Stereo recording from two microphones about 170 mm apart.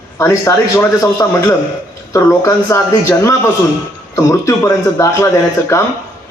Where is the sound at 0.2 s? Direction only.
20° left (ahead or behind).